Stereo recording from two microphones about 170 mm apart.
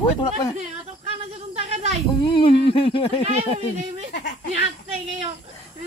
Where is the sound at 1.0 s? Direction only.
40° right (ahead or behind).